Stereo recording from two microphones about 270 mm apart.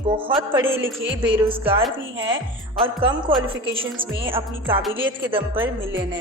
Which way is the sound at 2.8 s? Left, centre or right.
Centre.